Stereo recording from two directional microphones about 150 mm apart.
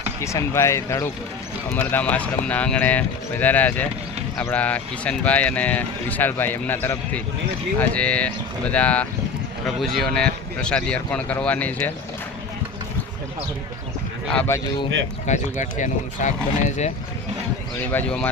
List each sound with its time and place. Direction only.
0.2 s speech: 20° left (ahead or behind)
14.3 s speech: 10° left (ahead or behind)
15.3 s speech: 55° left (ahead or behind)
17.7 s speech: 10° left (ahead or behind)